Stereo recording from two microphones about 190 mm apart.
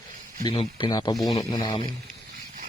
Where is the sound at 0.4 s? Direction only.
30° left (ahead or behind).